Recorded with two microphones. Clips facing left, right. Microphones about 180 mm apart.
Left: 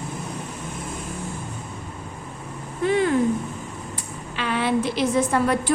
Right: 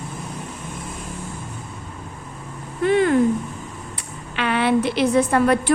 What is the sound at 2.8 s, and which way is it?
Cat, 60° right (ahead or behind).